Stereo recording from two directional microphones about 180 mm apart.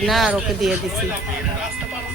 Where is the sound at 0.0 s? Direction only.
Centre (ahead or behind).